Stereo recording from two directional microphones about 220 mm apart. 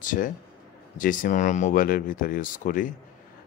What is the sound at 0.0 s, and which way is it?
Speech, 35° left (ahead or behind).